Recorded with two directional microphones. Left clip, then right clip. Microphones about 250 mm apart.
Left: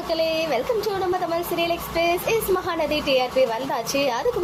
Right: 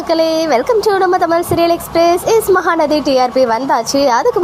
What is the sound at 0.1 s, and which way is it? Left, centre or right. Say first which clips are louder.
A woman's voice: right 10 dB; right.